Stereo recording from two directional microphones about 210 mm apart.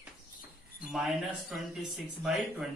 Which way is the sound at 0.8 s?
Centre (ahead or behind).